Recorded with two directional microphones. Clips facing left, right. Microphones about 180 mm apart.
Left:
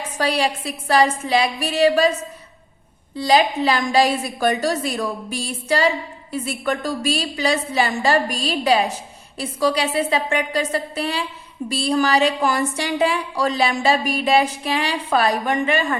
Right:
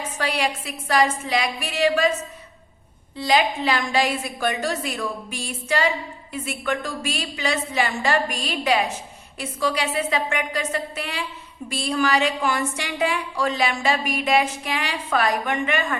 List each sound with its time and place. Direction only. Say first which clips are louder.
0.2 s a woman's voice: left 5 dB; 35° left (ahead or behind)
3.2 s a woman's voice: left 4 dB; 35° left (ahead or behind)